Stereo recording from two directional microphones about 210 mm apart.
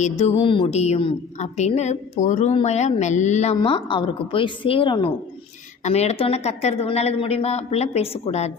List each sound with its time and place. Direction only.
0.0 s a woman's voice: 30° left (ahead or behind)